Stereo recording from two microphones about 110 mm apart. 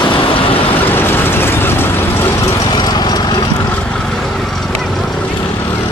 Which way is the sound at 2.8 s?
40° left (ahead or behind).